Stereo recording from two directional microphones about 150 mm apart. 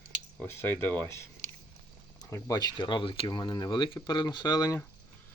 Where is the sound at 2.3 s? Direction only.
25° left (ahead or behind).